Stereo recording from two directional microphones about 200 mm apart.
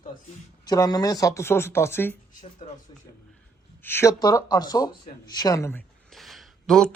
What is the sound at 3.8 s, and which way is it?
Speech, 10° left (ahead or behind).